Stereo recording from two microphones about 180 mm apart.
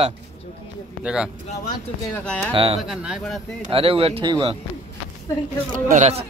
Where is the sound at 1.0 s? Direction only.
5° right (ahead or behind).